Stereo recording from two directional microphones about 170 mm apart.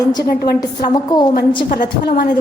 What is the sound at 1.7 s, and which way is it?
Speech, 50° left (ahead or behind).